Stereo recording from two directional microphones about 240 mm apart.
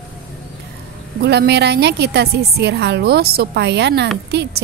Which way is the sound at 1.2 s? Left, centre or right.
Right.